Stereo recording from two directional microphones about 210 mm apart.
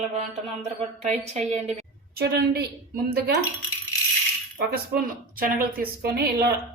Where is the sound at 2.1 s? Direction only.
50° right (ahead or behind).